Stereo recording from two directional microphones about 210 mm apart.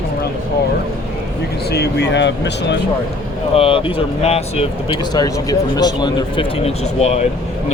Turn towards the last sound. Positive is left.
turn(degrees=30)  # may be behind; listen again after turning